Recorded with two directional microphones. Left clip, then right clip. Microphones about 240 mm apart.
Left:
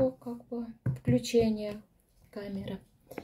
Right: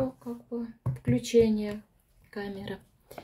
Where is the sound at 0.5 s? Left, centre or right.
Right.